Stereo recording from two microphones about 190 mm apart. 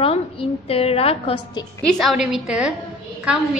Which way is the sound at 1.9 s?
Centre (ahead or behind).